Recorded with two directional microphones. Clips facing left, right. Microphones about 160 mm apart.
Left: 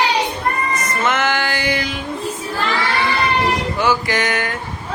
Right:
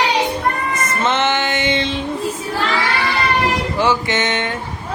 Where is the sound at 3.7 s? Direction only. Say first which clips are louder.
Right 1 dB; 25° right (ahead or behind).